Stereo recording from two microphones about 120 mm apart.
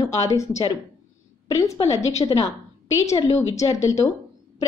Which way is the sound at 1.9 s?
25° left (ahead or behind).